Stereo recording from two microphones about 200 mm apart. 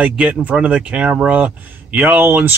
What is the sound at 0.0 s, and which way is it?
Speech, 5° right (ahead or behind).